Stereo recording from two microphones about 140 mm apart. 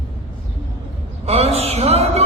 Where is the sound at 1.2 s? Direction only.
50° right (ahead or behind).